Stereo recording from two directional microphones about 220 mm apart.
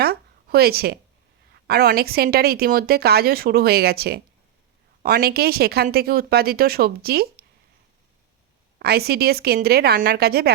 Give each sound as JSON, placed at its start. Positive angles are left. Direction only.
{"t": 0.0, "sound": "a sound", "side_deg": -45}
{"t": 1.6, "sound": "a woman's voice", "side_deg": -45}
{"t": 8.8, "sound": "a woman's voice", "side_deg": -45}